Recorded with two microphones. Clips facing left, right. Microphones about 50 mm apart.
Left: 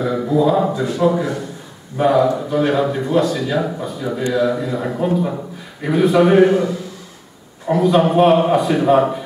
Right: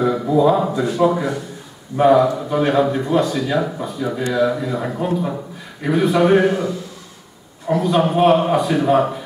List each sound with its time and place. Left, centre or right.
0.0 s a man's voice: centre